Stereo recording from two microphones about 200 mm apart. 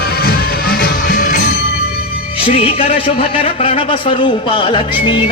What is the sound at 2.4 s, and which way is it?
A man's voice, 30° left (ahead or behind).